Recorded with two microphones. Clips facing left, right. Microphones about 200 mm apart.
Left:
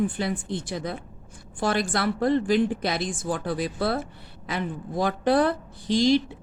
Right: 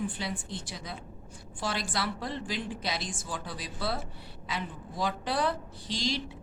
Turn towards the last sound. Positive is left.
turn(degrees=55)  # may be behind; listen again after turning